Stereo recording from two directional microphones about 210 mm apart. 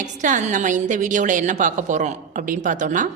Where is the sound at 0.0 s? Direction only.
35° right (ahead or behind).